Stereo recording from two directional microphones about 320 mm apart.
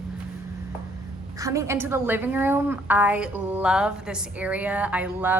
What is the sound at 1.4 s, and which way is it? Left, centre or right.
A woman's voice, centre.